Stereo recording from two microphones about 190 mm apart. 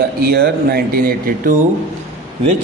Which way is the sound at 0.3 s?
55° right (ahead or behind).